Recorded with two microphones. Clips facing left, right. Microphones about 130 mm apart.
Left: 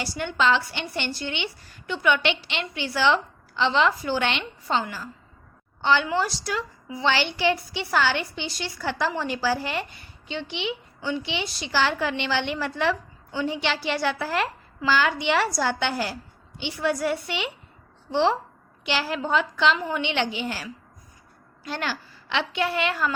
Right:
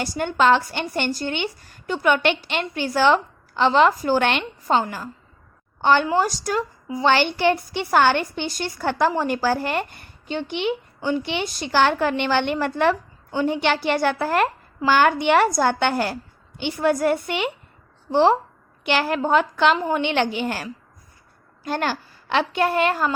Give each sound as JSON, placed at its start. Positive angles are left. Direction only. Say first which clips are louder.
{"t": 0.0, "sound": "a woman's voice", "louder": "right 5 dB", "side_deg": -45}